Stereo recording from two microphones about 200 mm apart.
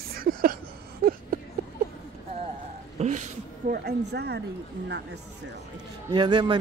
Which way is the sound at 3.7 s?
55° right (ahead or behind).